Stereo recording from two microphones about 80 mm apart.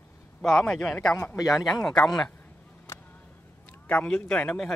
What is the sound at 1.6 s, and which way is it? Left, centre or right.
Speech, centre.